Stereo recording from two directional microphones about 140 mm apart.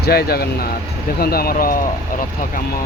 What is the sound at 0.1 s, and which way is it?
Speech, 90° left.